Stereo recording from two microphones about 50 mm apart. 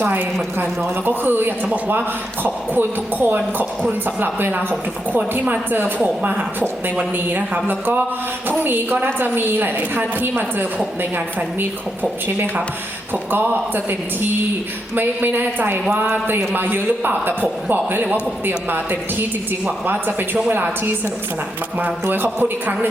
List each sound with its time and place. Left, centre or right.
0.0 s a man's voice: right
13.3 s a man's voice: right
21.8 s a man's voice: right